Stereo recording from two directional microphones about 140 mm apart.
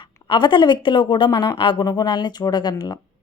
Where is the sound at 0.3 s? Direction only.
35° left (ahead or behind).